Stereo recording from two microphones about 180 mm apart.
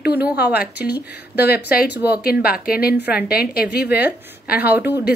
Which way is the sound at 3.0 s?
10° right (ahead or behind).